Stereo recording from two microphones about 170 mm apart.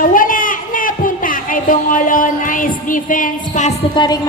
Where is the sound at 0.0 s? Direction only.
55° left (ahead or behind).